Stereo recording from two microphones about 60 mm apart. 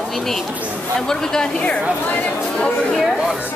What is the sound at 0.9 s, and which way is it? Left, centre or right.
Speech, centre.